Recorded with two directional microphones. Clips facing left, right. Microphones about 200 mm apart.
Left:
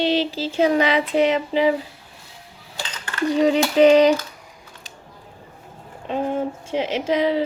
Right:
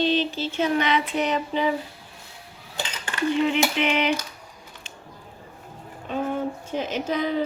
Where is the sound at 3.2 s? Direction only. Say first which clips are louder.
Left 4 dB; 40° left (ahead or behind).